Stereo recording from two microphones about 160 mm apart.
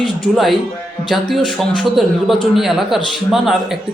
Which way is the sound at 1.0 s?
Centre (ahead or behind).